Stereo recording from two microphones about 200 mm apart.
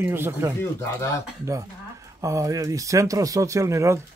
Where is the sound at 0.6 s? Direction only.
15° left (ahead or behind).